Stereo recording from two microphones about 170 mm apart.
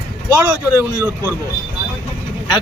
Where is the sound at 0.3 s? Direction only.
15° right (ahead or behind).